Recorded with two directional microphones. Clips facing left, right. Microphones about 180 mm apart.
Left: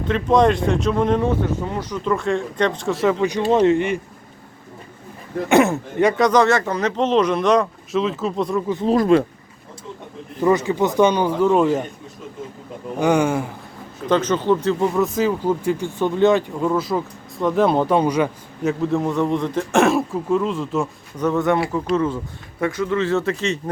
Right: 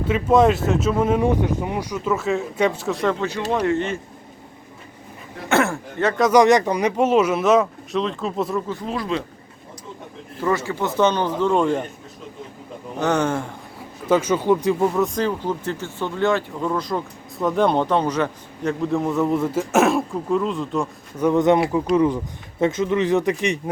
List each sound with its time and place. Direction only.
0.0 s speech: 5° right (ahead or behind); by 4.0 s 15° left (ahead or behind)
5.5 s speech: 20° left (ahead or behind)
6.3 s speech: 15° right (ahead or behind)
8.6 s speech: 20° left (ahead or behind)
8.9 s speech: 50° left (ahead or behind)
10.4 s speech: 20° left (ahead or behind)
13.0 s speech: 10° left (ahead or behind)
14.1 s speech: 10° right (ahead or behind)
14.9 s speech: 5° left (ahead or behind); by 16.6 s 20° left (ahead or behind)
16.6 s speech: 5° left (ahead or behind)
21.2 s speech: 20° right (ahead or behind)